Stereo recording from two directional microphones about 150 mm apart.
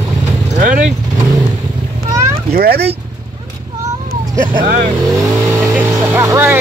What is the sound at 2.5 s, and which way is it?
Speech, 90° right.